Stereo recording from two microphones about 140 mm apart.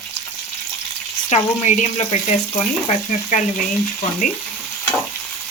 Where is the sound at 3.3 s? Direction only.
65° left (ahead or behind).